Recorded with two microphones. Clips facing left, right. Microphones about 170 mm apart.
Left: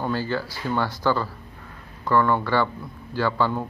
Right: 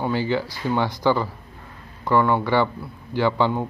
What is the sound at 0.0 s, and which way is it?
A man's voice, 15° right (ahead or behind).